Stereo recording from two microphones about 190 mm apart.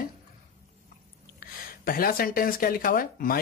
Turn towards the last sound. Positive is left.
turn(degrees=50)  # may be behind; listen again after turning